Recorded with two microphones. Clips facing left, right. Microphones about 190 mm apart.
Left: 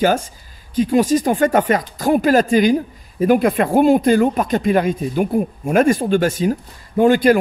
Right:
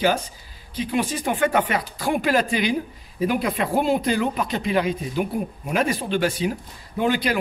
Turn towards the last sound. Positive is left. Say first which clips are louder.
# left 10 dB
turn(degrees=45)  # may be behind; listen again after turning